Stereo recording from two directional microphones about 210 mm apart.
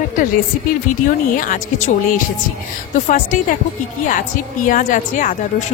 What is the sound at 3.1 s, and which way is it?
A woman's voice, 40° left (ahead or behind).